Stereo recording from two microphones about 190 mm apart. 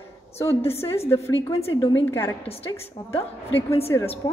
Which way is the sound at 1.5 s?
30° left (ahead or behind).